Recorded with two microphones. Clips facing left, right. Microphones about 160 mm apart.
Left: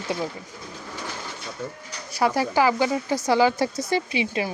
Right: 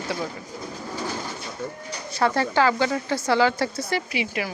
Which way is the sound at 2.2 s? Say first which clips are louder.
Even; 10° left (ahead or behind).